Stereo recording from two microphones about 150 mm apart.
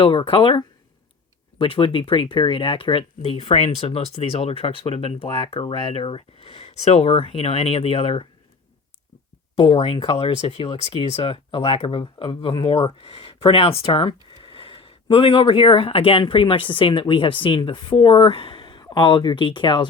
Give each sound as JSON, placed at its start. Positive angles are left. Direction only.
{"t": 0.0, "sound": "speech", "side_deg": 35}
{"t": 9.6, "sound": "speech", "side_deg": 40}